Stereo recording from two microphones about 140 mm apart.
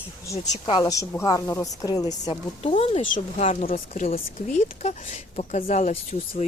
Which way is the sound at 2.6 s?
45° left (ahead or behind).